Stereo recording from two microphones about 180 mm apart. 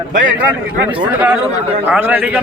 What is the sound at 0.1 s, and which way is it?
Speech, 90° right.